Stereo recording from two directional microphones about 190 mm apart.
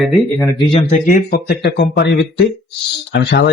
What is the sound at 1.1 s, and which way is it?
Speech, 50° left (ahead or behind).